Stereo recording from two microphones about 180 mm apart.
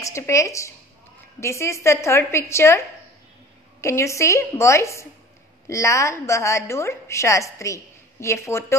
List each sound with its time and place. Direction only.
0.0 s a woman's voice: 15° left (ahead or behind)
3.8 s a woman's voice: 15° left (ahead or behind)